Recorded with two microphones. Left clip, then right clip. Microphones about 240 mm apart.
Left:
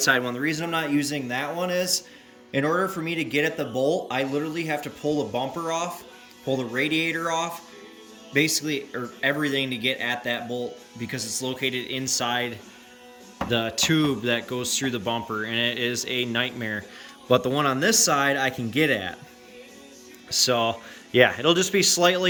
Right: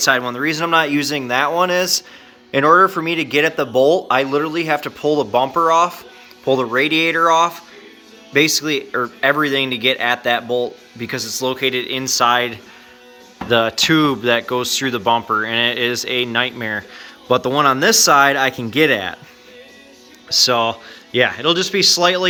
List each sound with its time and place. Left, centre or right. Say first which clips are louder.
0.0 s speech: right 6 dB; centre
20.4 s speech: right 6 dB; centre